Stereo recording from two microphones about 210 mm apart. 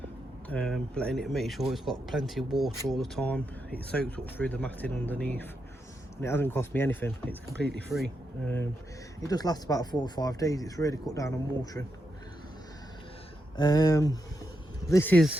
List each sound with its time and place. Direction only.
0.4 s speech: 5° left (ahead or behind)
13.6 s speech: 20° left (ahead or behind)